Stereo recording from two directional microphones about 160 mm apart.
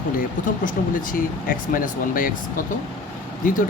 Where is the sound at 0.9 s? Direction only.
60° left (ahead or behind).